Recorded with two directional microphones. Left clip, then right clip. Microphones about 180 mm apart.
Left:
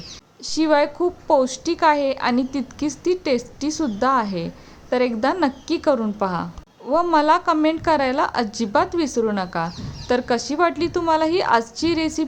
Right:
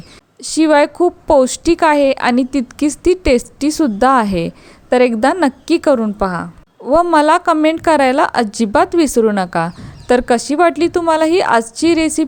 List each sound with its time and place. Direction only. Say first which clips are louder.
0.4 s a woman's voice: right 7 dB; 35° right (ahead or behind)
6.9 s a woman's voice: right 6 dB; 40° right (ahead or behind)